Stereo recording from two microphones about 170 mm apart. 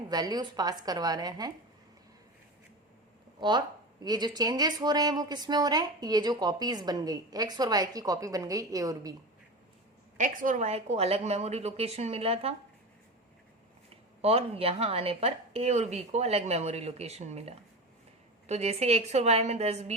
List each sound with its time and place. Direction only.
0.1 s a woman's voice: 25° right (ahead or behind)
4.0 s a woman's voice: 25° right (ahead or behind)
10.2 s speech: 50° right (ahead or behind)
13.9 s speech: 35° right (ahead or behind)